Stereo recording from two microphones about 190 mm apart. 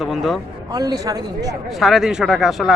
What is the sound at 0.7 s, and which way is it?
Speech, 20° right (ahead or behind).